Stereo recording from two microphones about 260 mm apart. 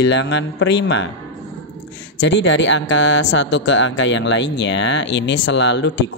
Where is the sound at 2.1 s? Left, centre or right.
Left.